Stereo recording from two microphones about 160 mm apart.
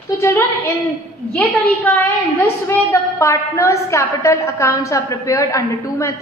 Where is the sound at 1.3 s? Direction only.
10° left (ahead or behind).